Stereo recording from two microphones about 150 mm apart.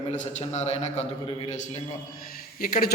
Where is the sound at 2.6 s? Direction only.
70° left (ahead or behind).